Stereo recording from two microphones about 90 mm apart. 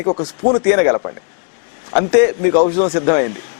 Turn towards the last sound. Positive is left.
turn(degrees=15)  # may be behind; listen again after turning